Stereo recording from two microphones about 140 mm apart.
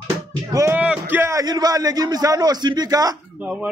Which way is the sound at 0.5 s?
15° right (ahead or behind).